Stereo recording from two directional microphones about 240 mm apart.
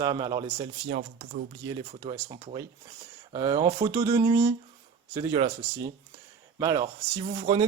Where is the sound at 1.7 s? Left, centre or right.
Centre.